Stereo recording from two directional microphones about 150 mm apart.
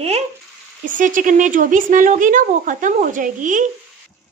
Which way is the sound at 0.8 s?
60° right (ahead or behind).